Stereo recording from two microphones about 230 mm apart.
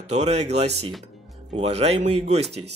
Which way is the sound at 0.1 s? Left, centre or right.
Right.